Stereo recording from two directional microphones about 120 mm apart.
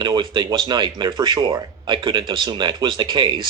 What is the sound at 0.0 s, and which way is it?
Speech, 40° right (ahead or behind).